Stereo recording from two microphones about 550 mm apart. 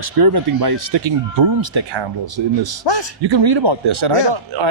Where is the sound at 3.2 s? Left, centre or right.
Right.